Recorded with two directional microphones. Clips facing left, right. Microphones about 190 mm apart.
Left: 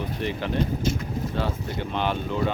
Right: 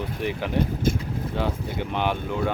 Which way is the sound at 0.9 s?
50° right (ahead or behind).